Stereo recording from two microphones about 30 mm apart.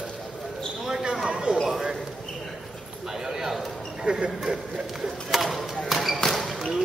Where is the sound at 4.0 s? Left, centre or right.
Right.